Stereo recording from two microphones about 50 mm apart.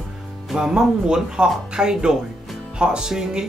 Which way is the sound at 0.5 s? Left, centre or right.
Centre.